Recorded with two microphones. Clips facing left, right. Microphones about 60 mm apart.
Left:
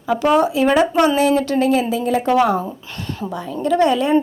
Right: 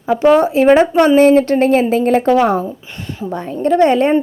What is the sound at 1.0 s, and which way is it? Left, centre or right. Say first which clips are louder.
A woman's voice: right 6 dB; right.